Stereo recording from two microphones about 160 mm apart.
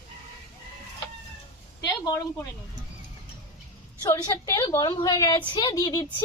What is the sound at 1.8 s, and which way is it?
Speech, 20° left (ahead or behind).